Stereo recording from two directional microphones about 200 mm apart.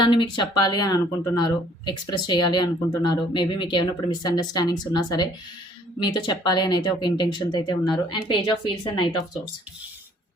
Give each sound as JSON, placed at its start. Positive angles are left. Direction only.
{"t": 0.0, "sound": "speech", "side_deg": 25}